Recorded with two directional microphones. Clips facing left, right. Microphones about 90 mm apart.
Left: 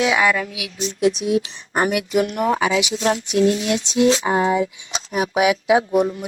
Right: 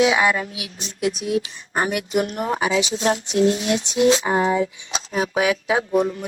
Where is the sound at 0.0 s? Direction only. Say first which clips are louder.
Even; 5° right (ahead or behind).